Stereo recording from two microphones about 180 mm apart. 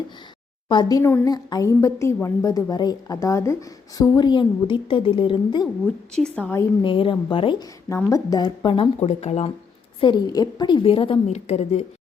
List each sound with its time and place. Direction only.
0.7 s a woman's voice: 25° left (ahead or behind)
6.3 s a woman's voice: 10° left (ahead or behind)
6.8 s a woman's voice: 30° left (ahead or behind)
7.9 s a woman's voice: 20° left (ahead or behind); by 9.5 s 35° left (ahead or behind)
10.0 s a woman's voice: 25° left (ahead or behind)